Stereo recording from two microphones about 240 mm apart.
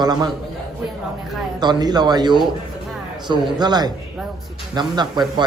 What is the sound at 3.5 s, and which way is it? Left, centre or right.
A man's voice, centre.